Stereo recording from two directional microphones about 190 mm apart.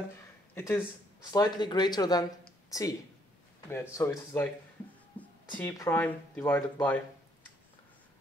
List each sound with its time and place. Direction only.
0.6 s speech: 10° left (ahead or behind)
5.2 s a sound: 10° left (ahead or behind)
5.6 s speech: 10° left (ahead or behind)